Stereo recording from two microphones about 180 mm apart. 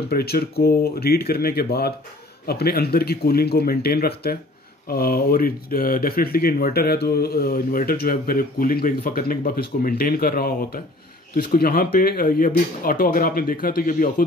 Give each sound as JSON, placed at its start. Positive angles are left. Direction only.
{"t": 0.1, "sound": "speech", "side_deg": 60}